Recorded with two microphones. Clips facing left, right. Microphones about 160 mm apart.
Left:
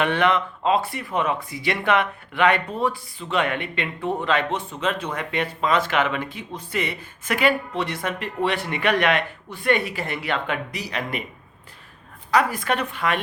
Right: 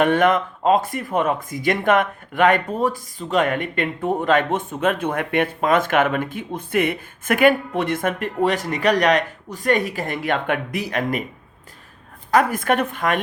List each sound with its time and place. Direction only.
0.0 s speech: 45° right (ahead or behind)
12.3 s speech: 50° right (ahead or behind)